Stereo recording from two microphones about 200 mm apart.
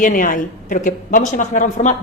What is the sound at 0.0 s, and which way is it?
A woman's voice, 40° left (ahead or behind).